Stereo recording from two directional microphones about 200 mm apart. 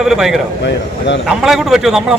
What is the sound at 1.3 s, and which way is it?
Speech, centre (ahead or behind).